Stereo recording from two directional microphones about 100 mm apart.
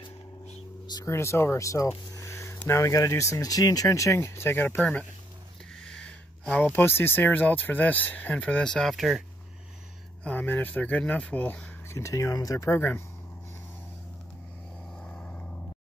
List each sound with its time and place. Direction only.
1.0 s speech: 30° left (ahead or behind)
5.9 s speech: 5° left (ahead or behind)
10.2 s speech: 20° left (ahead or behind)
11.9 s speech: 30° left (ahead or behind)
12.6 s speech: 25° left (ahead or behind)
15.0 s vehicle: 10° left (ahead or behind)